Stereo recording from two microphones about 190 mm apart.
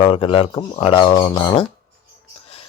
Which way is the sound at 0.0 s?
30° left (ahead or behind).